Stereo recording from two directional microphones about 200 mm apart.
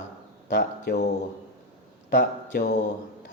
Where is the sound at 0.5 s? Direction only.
55° left (ahead or behind).